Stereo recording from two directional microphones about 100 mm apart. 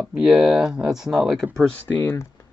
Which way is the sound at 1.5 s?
10° left (ahead or behind).